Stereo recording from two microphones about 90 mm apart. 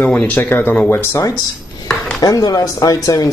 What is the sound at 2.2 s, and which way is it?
Speech, 45° left (ahead or behind).